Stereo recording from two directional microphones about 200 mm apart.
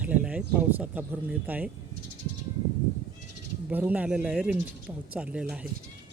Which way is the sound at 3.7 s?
5° right (ahead or behind).